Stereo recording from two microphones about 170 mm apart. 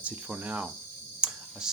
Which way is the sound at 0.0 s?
10° right (ahead or behind).